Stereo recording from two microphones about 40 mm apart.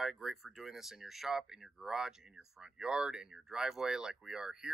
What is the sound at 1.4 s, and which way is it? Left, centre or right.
Speech, centre.